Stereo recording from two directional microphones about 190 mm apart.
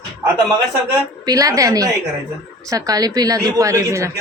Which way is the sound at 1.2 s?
20° right (ahead or behind).